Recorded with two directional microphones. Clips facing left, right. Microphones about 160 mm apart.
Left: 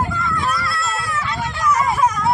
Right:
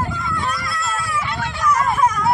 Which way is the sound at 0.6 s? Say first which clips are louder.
Left 1 dB; 15° right (ahead or behind).